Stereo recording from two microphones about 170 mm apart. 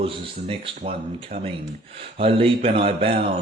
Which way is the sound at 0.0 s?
30° right (ahead or behind).